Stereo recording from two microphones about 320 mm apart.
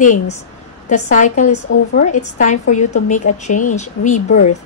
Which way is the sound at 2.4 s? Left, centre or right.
Left.